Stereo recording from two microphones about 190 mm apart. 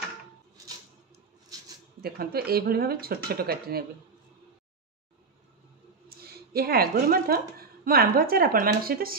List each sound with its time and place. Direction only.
2.0 s speech: 55° right (ahead or behind)
6.0 s a woman's voice: 55° right (ahead or behind)